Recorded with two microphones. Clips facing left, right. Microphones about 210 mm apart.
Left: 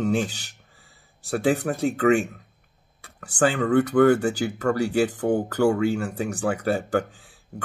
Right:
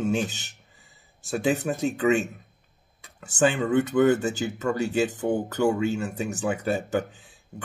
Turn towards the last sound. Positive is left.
turn(degrees=-20)  # may be behind; listen again after turning